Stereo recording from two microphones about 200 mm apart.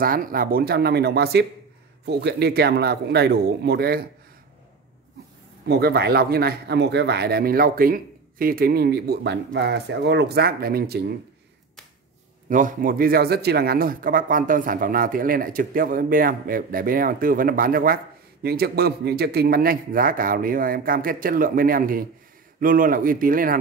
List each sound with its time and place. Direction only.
0.0 s speech: 45° right (ahead or behind)
5.7 s speech: 55° right (ahead or behind)
12.4 s speech: 40° right (ahead or behind)